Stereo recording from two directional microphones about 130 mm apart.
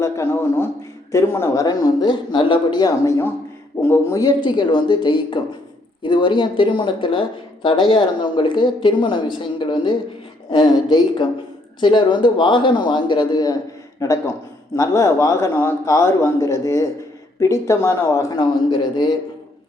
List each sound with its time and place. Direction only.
0.0 s a man's voice: 20° left (ahead or behind)
1.6 s speech: 30° left (ahead or behind)
4.2 s a man's voice: 35° left (ahead or behind)